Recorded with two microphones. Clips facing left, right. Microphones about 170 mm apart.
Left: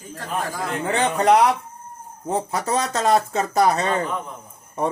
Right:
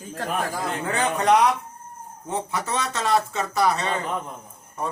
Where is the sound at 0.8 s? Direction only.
25° left (ahead or behind).